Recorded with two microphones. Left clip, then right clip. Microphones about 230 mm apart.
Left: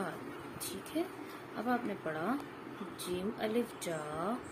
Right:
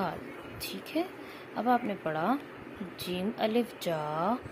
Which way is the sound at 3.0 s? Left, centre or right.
Right.